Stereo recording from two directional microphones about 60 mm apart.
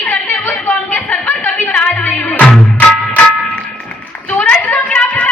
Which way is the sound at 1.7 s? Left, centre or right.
Left.